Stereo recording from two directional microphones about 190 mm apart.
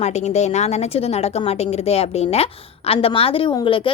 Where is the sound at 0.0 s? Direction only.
35° left (ahead or behind).